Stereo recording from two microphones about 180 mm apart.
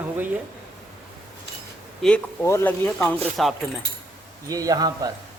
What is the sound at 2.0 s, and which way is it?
Speech, 5° left (ahead or behind).